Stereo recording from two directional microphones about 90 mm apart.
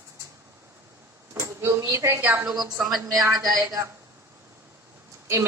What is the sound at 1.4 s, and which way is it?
A woman's voice, 30° right (ahead or behind).